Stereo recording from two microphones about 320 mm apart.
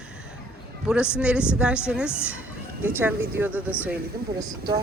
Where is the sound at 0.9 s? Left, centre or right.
Centre.